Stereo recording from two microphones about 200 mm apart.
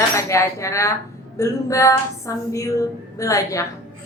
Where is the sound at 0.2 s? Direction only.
15° left (ahead or behind).